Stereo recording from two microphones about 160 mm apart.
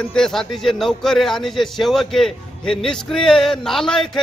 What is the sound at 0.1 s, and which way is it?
A man's voice, 5° left (ahead or behind).